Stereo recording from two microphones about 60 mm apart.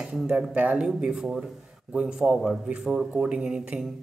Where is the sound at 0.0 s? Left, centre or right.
Centre.